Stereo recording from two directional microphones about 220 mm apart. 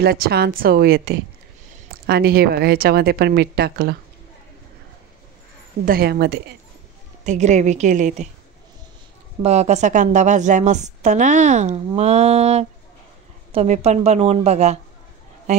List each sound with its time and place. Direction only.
0.0 s a woman's voice: 45° right (ahead or behind)
5.9 s a woman's voice: 45° right (ahead or behind)
7.2 s a woman's voice: 30° right (ahead or behind)
9.4 s a woman's voice: 30° right (ahead or behind)